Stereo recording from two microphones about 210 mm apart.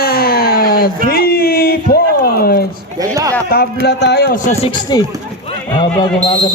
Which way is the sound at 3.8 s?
50° left (ahead or behind).